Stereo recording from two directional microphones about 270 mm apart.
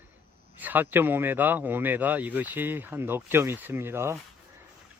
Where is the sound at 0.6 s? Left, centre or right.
Centre.